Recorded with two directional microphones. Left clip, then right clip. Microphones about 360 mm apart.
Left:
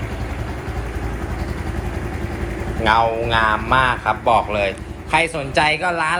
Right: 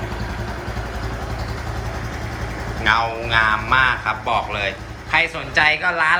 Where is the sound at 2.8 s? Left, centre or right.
Centre.